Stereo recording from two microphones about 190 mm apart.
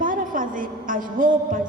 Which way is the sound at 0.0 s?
45° right (ahead or behind).